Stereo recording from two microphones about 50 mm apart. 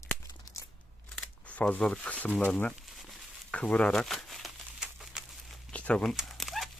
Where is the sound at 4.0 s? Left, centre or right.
Centre.